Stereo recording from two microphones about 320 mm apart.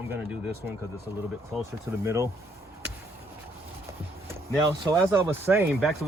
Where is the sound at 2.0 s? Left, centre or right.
Centre.